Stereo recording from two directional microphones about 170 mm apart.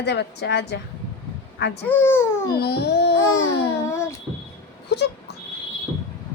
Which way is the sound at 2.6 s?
70° left (ahead or behind).